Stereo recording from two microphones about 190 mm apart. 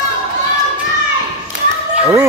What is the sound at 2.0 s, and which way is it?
Chicken, 15° right (ahead or behind).